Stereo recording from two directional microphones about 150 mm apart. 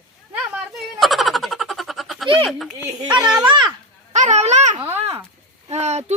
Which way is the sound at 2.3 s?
35° right (ahead or behind).